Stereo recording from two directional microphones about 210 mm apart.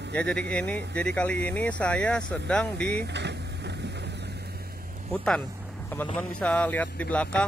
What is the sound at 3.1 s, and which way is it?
Vehicle, 55° right (ahead or behind).